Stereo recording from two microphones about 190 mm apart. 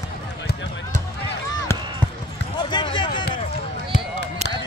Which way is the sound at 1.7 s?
15° left (ahead or behind).